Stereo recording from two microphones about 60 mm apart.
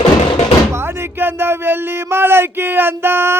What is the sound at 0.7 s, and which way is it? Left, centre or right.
Speech, right.